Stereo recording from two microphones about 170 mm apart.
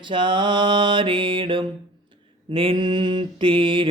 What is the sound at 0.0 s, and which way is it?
Mantra, 30° right (ahead or behind).